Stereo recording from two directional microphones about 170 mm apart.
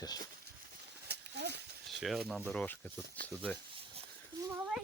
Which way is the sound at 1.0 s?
80° right.